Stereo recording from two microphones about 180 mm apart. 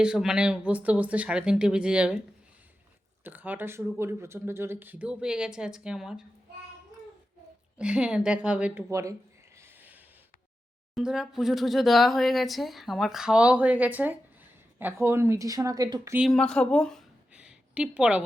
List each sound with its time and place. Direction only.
0.0 s speech: 5° right (ahead or behind)
3.2 s speech: 10° right (ahead or behind)
7.8 s speech: 5° right (ahead or behind)
9.6 s a sound: 10° right (ahead or behind)
10.9 s speech: 5° right (ahead or behind); by 16.1 s 20° right (ahead or behind)
16.1 s speech: centre (ahead or behind)